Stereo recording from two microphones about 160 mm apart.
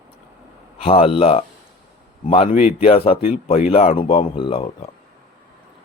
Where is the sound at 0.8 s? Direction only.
35° left (ahead or behind).